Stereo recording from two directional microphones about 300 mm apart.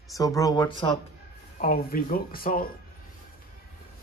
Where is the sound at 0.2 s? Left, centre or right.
Centre.